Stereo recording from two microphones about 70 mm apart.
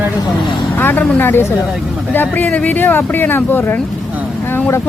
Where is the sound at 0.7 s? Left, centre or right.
Left.